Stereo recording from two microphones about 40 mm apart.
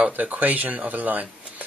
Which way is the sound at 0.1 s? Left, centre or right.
Right.